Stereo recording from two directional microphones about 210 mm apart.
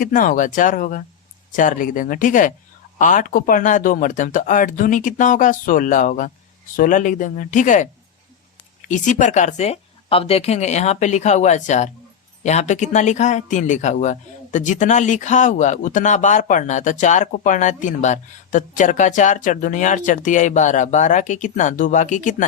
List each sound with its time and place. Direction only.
0.0 s speech: 40° left (ahead or behind)